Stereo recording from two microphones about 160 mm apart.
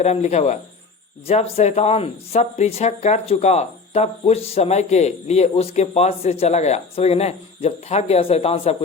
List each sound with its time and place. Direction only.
0.0 s a man's voice: 45° left (ahead or behind)